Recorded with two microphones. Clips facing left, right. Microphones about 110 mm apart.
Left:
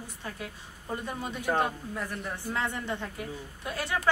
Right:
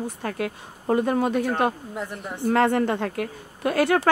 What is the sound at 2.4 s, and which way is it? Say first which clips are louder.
A woman's voice: right 15 dB; 70° right (ahead or behind).